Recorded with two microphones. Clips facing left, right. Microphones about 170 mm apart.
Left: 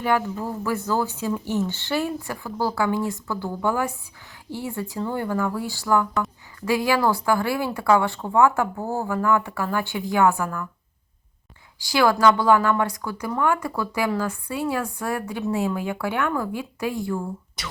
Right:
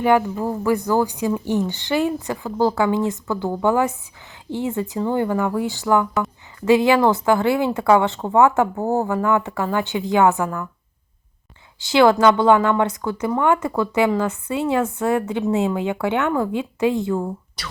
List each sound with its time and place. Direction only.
0.0 s speech: 15° right (ahead or behind)
11.8 s speech: 20° right (ahead or behind)